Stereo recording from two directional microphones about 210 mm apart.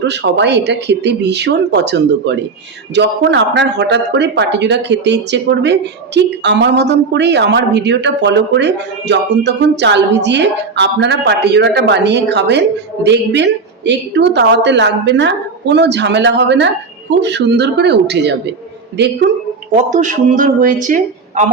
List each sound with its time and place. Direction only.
0.0 s speech: 55° right (ahead or behind)
19.7 s speech: 35° right (ahead or behind)